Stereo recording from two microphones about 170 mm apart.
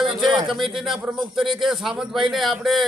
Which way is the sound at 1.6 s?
Centre (ahead or behind).